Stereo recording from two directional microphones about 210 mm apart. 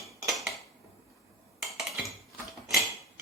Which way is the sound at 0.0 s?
Centre (ahead or behind).